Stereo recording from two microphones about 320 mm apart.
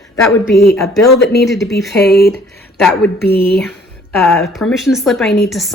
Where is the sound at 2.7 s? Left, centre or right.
Centre.